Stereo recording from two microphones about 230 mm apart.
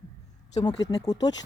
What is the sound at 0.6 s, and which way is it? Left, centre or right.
Speech, left.